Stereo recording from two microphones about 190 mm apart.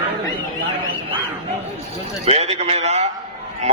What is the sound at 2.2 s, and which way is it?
Speech, 35° right (ahead or behind).